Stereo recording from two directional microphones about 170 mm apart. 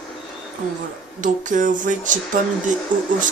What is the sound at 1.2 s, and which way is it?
Speech, 50° right (ahead or behind).